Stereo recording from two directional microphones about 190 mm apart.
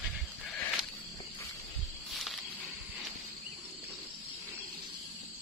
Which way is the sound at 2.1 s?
Centre (ahead or behind).